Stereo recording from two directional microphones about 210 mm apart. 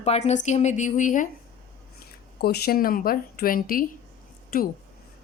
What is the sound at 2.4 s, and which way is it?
A woman's voice, 50° left (ahead or behind).